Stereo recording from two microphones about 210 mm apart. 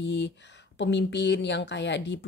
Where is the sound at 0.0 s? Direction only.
60° left (ahead or behind).